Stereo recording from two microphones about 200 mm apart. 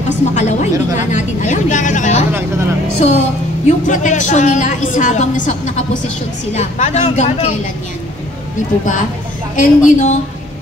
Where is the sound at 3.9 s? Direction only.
40° left (ahead or behind).